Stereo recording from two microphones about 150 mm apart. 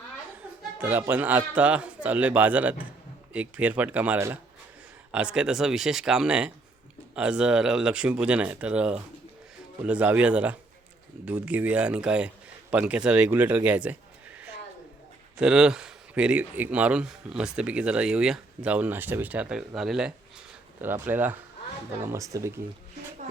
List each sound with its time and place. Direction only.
0.8 s speech: 10° right (ahead or behind)
15.4 s speech: 5° right (ahead or behind)
20.8 s speech: 15° right (ahead or behind)